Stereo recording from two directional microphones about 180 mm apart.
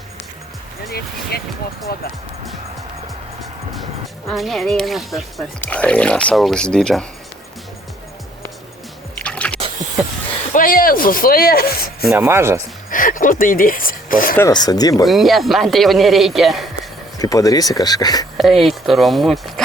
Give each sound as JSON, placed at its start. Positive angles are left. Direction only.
{"t": 1.3, "sound": "speech", "side_deg": 60}
{"t": 4.3, "sound": "speech", "side_deg": 0}
{"t": 9.1, "sound": "drip", "side_deg": 5}
{"t": 10.5, "sound": "rub", "side_deg": 50}
{"t": 12.1, "sound": "speech", "side_deg": -10}
{"t": 12.9, "sound": "speech", "side_deg": 50}
{"t": 14.3, "sound": "speech", "side_deg": 20}
{"t": 15.0, "sound": "speech", "side_deg": 0}
{"t": 17.2, "sound": "speech", "side_deg": 20}
{"t": 18.3, "sound": "speech", "side_deg": 0}